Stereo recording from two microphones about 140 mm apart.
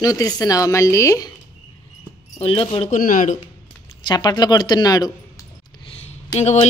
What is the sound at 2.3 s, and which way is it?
Speech, 40° left (ahead or behind).